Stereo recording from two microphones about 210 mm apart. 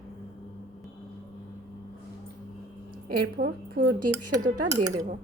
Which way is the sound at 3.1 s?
45° right (ahead or behind).